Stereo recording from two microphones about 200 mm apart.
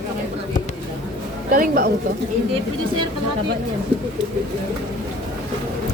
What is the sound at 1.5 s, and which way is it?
Speech, 45° right (ahead or behind).